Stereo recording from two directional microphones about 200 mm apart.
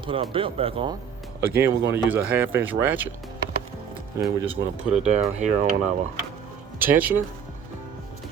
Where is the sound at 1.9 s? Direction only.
10° right (ahead or behind).